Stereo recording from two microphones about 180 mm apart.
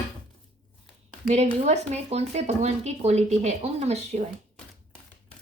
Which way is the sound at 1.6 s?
40° right (ahead or behind).